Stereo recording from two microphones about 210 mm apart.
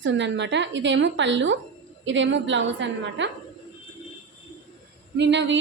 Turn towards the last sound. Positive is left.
turn(degrees=-55)  # may be behind; listen again after turning